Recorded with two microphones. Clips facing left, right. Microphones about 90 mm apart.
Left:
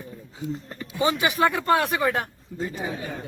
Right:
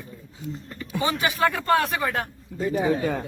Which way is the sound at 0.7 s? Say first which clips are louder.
Left 1 dB; 25° left (ahead or behind).